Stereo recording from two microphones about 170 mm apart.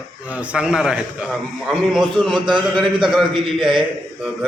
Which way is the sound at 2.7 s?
Centre (ahead or behind).